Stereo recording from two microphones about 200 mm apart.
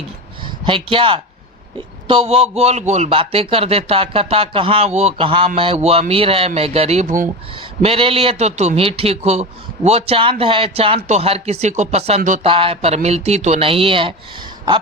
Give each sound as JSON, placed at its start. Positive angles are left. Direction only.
{"t": 0.4, "sound": "a man's voice", "side_deg": -25}